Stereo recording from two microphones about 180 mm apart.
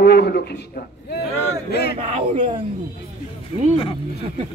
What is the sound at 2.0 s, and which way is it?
Speech, 40° right (ahead or behind).